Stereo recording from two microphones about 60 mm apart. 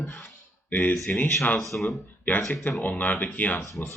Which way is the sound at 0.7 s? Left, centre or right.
Left.